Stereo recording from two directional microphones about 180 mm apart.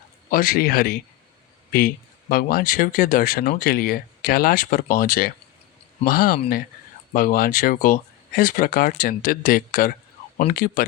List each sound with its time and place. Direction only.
0.3 s speech: 55° left (ahead or behind)
2.3 s speech: 55° left (ahead or behind)